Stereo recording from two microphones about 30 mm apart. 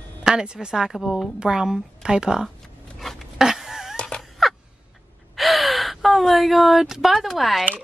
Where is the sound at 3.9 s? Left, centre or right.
Left.